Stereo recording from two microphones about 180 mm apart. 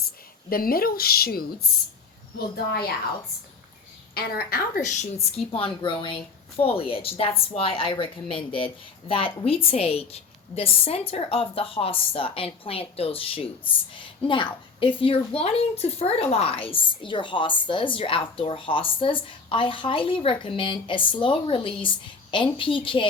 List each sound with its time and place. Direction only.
0.5 s speech: 55° left (ahead or behind)
4.1 s a woman's voice: 60° left (ahead or behind); by 23.0 s 30° left (ahead or behind)